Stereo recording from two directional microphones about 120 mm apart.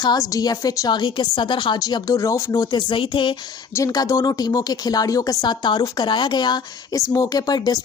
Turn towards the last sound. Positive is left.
turn(degrees=35)  # may be behind; listen again after turning